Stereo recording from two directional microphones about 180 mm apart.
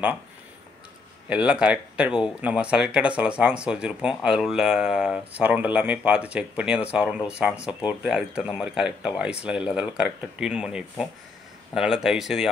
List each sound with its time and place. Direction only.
1.3 s speech: 5° right (ahead or behind)